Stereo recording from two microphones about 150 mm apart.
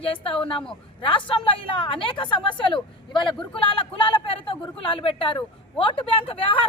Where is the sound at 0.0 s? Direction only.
40° left (ahead or behind).